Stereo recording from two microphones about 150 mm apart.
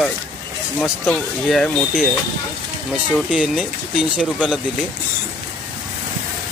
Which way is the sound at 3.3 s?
5° right (ahead or behind).